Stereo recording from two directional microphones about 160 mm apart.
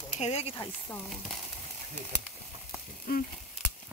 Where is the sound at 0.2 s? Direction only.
40° left (ahead or behind).